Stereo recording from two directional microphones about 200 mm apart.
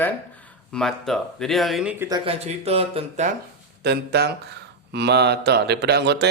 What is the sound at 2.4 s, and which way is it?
Speech, 30° right (ahead or behind).